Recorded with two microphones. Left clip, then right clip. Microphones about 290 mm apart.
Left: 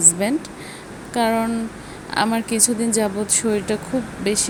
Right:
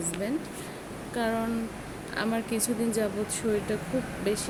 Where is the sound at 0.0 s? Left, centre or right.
Left.